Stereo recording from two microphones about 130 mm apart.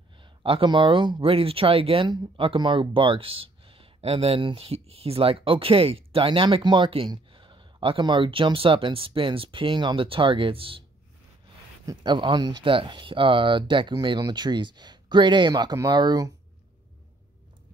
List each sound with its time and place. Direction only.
0.2 s speech: 45° right (ahead or behind)
11.8 s speech: 30° right (ahead or behind)